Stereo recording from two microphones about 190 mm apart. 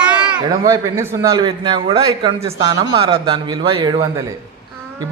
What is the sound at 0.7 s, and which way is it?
A man's voice, 15° right (ahead or behind).